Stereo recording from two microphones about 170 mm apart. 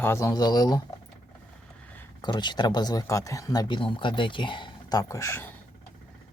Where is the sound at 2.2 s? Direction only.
25° left (ahead or behind).